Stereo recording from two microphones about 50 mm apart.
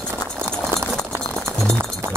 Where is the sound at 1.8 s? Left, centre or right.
Right.